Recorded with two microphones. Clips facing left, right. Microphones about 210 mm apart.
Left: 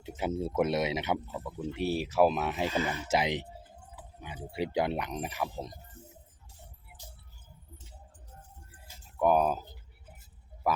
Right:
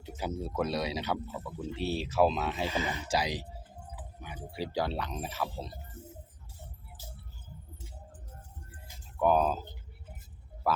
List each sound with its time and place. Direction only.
0.0 s speech: 25° left (ahead or behind)
2.6 s speech: 15° right (ahead or behind)
3.1 s speech: 20° left (ahead or behind)
9.1 s speech: 10° left (ahead or behind)
10.6 s a sound: 15° left (ahead or behind)